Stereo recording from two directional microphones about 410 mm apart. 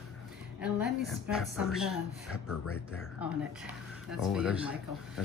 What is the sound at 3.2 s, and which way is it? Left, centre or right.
Speech, centre.